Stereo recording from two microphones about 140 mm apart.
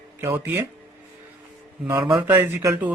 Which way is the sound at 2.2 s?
10° right (ahead or behind).